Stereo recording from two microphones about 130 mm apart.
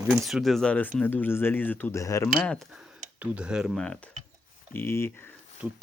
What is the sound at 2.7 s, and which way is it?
Speech, 10° right (ahead or behind).